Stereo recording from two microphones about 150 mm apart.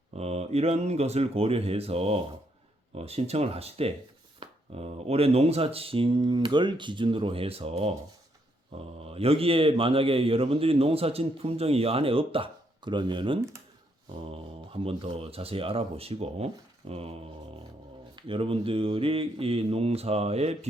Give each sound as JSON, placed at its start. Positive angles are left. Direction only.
{"t": 0.1, "sound": "a man's voice", "side_deg": -45}
{"t": 9.0, "sound": "a man's voice", "side_deg": -40}
{"t": 18.2, "sound": "a man's voice", "side_deg": -35}